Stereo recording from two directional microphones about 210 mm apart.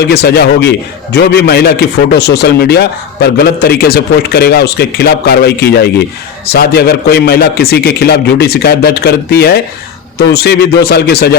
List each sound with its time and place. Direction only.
0.1 s a man's voice: 50° left (ahead or behind)